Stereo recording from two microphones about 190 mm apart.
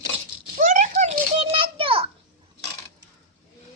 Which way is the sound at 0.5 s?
40° right (ahead or behind).